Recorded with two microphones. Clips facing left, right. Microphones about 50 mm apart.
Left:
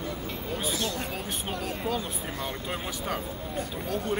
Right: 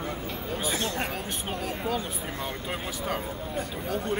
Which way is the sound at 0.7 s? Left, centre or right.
Right.